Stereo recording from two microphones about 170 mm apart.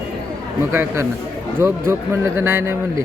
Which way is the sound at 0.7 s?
15° right (ahead or behind).